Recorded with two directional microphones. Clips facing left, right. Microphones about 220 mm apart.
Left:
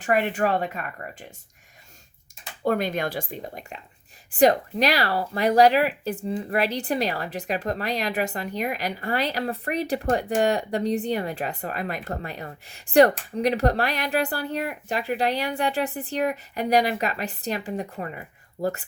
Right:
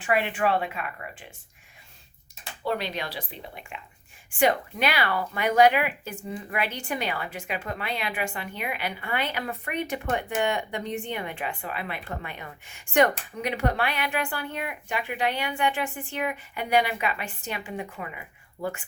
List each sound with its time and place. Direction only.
0.0 s speech: 45° left (ahead or behind)
2.6 s speech: 50° left (ahead or behind)